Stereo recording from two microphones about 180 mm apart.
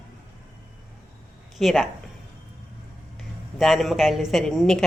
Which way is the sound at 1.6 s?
Centre (ahead or behind).